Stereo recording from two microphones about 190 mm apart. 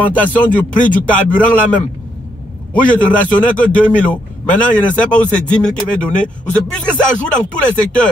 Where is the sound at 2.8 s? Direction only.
5° left (ahead or behind).